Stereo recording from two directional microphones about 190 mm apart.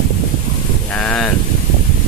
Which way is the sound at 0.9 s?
5° left (ahead or behind).